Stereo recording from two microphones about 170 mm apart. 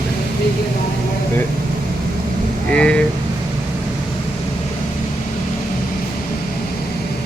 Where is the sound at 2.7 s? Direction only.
5° left (ahead or behind).